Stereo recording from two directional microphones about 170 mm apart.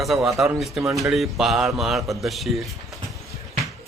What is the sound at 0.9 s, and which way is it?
A man's voice, centre (ahead or behind).